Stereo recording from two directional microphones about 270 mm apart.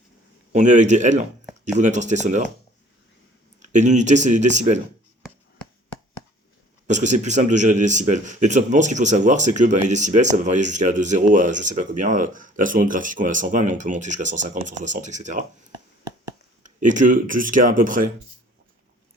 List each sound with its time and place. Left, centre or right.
0.5 s a man's voice: right
3.6 s a man's voice: right
6.8 s a man's voice: right
16.6 s a man's voice: right